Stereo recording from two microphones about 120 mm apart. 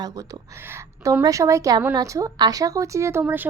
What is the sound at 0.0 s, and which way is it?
A woman's voice, 30° right (ahead or behind).